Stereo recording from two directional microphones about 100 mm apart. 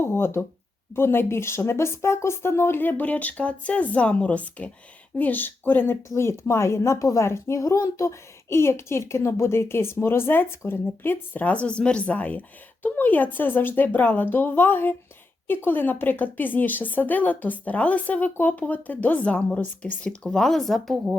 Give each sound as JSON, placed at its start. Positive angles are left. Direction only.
{"t": 0.0, "sound": "a woman's voice", "side_deg": 25}